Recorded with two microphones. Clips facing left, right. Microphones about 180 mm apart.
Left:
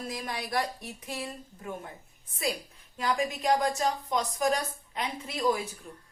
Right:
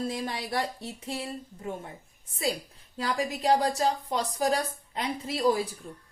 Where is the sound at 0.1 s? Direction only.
30° right (ahead or behind).